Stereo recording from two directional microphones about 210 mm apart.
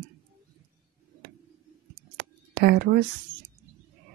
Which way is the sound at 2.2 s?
50° right (ahead or behind).